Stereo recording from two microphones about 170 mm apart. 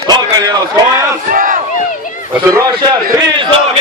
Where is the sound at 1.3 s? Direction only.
55° right (ahead or behind).